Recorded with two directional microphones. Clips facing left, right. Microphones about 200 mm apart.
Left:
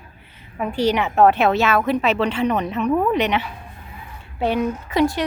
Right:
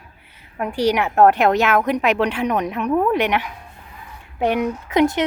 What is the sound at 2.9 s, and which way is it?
Speech, centre (ahead or behind).